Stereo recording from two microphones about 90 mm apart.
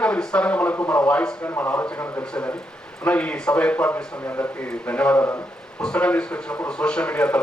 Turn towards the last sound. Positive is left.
turn(degrees=15)  # may be behind; listen again after turning